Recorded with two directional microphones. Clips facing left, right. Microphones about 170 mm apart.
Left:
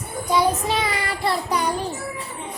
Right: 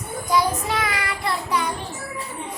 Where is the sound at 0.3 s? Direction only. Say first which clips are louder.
Left 2 dB; 25° left (ahead or behind).